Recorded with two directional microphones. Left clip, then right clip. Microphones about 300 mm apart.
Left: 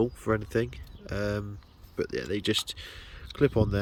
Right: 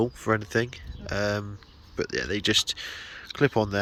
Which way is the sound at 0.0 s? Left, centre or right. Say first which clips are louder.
Right 2 dB; centre.